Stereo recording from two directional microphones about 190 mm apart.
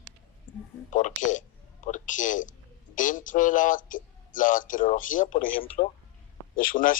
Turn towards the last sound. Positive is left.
turn(degrees=45)  # may be behind; listen again after turning